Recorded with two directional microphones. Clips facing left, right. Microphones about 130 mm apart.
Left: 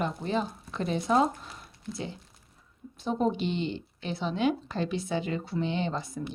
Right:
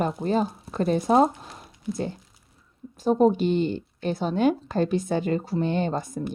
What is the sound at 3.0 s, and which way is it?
A woman's voice, 45° right (ahead or behind).